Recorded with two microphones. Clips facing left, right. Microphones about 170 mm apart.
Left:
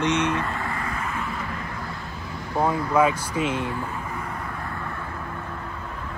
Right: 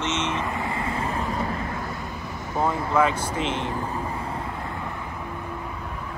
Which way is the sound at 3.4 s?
25° right (ahead or behind).